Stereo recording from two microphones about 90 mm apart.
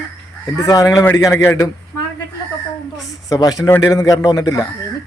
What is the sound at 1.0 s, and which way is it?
Speech, 30° left (ahead or behind).